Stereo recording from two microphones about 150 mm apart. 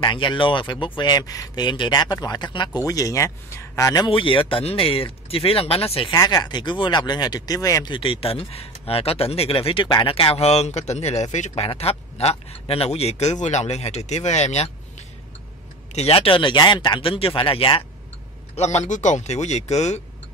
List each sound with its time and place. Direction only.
0.0 s speech: 30° left (ahead or behind)
6.1 s speech: 25° left (ahead or behind); by 14.7 s 50° left (ahead or behind)
15.9 s speech: 45° left (ahead or behind)
18.6 s speech: 50° left (ahead or behind)